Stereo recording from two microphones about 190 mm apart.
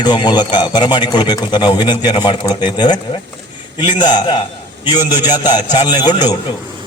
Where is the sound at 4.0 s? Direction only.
20° left (ahead or behind).